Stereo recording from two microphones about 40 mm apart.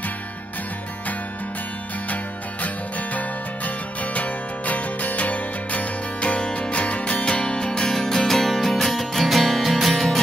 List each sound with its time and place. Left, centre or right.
3.2 s music: left
7.2 s music: left; by 10.0 s centre